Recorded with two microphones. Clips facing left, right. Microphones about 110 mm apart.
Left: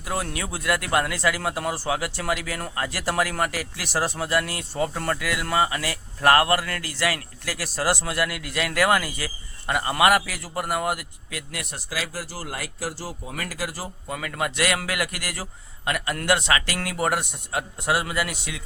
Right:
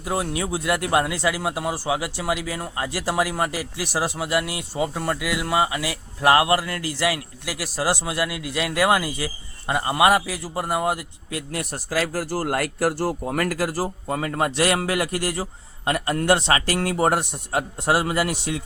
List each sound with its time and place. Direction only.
0.0 s speech: 20° right (ahead or behind); by 18.6 s 40° right (ahead or behind)